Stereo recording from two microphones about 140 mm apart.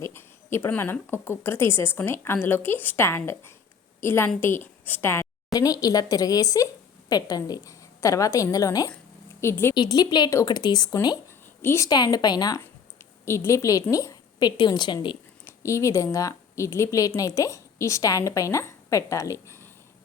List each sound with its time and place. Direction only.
0.0 s a woman's voice: 15° left (ahead or behind)
9.7 s a woman's voice: 30° left (ahead or behind)
15.4 s a woman's voice: 20° left (ahead or behind)